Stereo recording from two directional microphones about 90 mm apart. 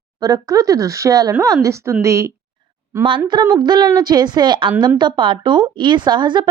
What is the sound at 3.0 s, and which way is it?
Speech, 60° right (ahead or behind).